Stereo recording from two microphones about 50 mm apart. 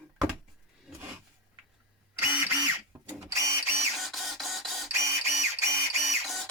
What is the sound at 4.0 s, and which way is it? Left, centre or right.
Printer, centre.